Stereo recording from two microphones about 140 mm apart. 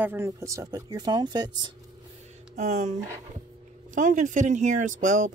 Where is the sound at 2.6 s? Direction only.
55° right (ahead or behind).